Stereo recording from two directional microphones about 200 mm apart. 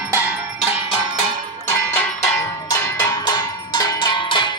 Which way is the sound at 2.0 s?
10° left (ahead or behind).